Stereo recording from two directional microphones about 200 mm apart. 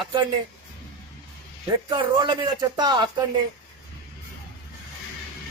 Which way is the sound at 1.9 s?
25° right (ahead or behind).